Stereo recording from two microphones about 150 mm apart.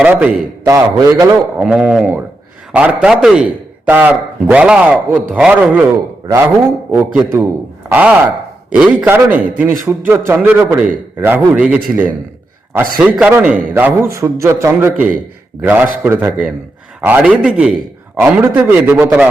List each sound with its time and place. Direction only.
0.0 s a man's voice: 10° right (ahead or behind)
0.6 s a man's voice: 25° right (ahead or behind)
1.5 s a man's voice: 5° right (ahead or behind)
6.2 s a man's voice: 15° right (ahead or behind)